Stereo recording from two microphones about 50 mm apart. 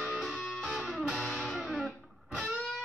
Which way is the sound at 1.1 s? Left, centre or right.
Centre.